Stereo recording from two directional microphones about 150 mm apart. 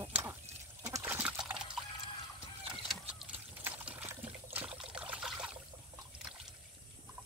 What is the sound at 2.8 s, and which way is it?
Trickle, 10° right (ahead or behind).